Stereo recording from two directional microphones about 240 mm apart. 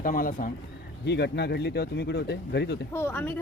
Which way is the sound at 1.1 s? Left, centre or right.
Left.